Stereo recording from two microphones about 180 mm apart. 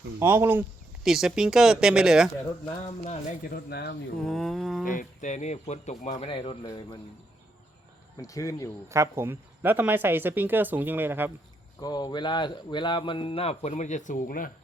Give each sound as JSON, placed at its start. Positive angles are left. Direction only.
{"t": 0.2, "sound": "speech", "side_deg": -10}
{"t": 2.6, "sound": "speech", "side_deg": 35}
{"t": 3.4, "sound": "speech", "side_deg": 60}
{"t": 4.3, "sound": "speech", "side_deg": 0}
{"t": 4.9, "sound": "speech", "side_deg": 45}
{"t": 8.2, "sound": "speech", "side_deg": 20}
{"t": 8.9, "sound": "speech", "side_deg": -15}
{"t": 11.8, "sound": "speech", "side_deg": 20}